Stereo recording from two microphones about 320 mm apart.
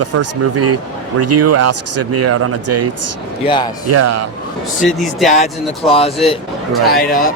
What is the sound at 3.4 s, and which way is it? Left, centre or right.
Speech, centre.